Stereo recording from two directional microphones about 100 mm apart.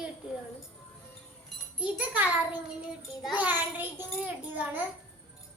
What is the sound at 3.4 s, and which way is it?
A child's voice, 20° right (ahead or behind).